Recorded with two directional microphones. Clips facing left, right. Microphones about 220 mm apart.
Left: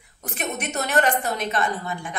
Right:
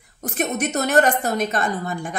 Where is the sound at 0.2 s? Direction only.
45° right (ahead or behind).